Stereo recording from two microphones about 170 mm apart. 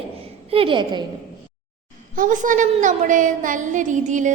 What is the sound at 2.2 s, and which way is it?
A woman's voice, 50° right (ahead or behind).